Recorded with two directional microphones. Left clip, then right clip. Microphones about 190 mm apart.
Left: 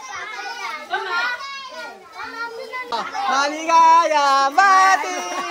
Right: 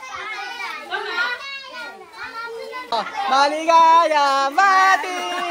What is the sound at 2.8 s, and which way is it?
Speech, 10° left (ahead or behind).